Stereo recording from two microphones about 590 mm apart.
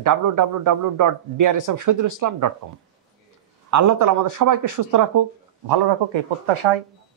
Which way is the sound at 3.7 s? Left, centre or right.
Right.